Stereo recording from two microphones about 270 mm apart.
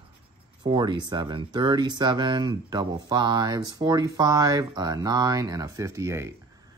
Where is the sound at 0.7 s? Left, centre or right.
Centre.